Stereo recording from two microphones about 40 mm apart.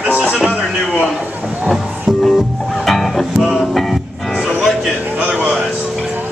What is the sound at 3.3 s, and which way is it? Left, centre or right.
Music, centre.